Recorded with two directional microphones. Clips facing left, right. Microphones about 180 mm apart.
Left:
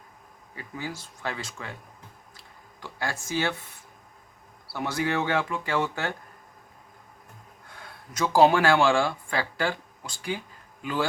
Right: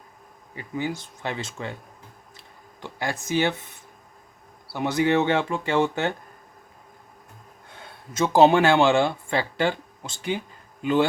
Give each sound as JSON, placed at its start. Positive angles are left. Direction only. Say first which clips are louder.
{"t": 0.5, "sound": "speech", "louder": "right 7 dB", "side_deg": -20}
{"t": 2.8, "sound": "speech", "louder": "right 3 dB", "side_deg": -20}
{"t": 4.7, "sound": "speech", "louder": "right 6 dB", "side_deg": -20}
{"t": 7.8, "sound": "speech", "louder": "right 4 dB", "side_deg": -25}